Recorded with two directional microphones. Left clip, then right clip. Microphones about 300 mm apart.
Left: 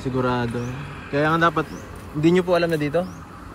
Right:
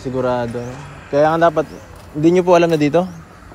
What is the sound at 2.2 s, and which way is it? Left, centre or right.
Speech, centre.